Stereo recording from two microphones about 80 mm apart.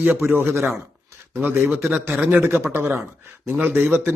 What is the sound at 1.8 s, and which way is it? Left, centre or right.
Speech, right.